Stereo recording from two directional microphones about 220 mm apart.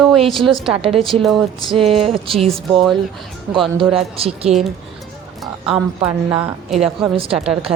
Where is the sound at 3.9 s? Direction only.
25° right (ahead or behind).